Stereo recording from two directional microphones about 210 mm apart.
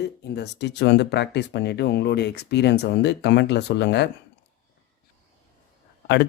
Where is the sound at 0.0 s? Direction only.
55° left (ahead or behind).